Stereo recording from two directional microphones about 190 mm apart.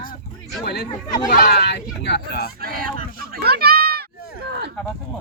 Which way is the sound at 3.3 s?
55° right (ahead or behind).